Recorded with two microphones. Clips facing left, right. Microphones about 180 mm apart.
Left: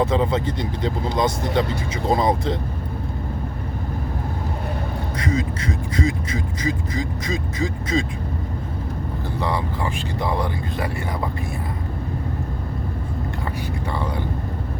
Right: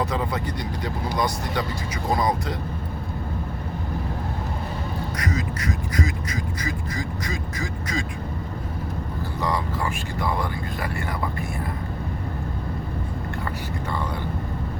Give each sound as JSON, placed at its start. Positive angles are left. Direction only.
{"t": 0.0, "sound": "speech", "side_deg": 25}
{"t": 5.1, "sound": "speech", "side_deg": 25}
{"t": 9.4, "sound": "speech", "side_deg": 25}